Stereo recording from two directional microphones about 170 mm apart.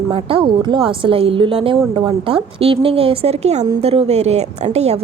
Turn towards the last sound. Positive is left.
turn(degrees=-40)  # may be behind; listen again after turning